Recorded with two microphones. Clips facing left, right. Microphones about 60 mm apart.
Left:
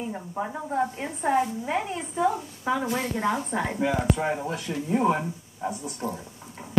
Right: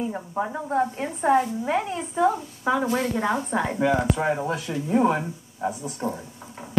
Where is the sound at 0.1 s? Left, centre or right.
Centre.